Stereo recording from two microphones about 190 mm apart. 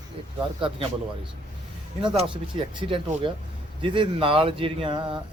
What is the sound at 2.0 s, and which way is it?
Speech, 30° right (ahead or behind).